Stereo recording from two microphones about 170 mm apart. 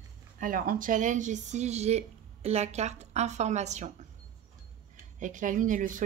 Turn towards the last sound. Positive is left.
turn(degrees=-50)  # may be behind; listen again after turning